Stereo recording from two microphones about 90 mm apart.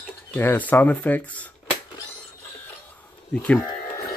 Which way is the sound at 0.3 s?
20° left (ahead or behind).